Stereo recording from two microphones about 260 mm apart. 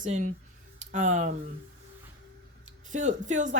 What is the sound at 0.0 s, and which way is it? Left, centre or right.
Speech, right.